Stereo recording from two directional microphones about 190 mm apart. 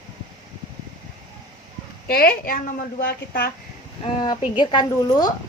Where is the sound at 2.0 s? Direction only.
50° left (ahead or behind).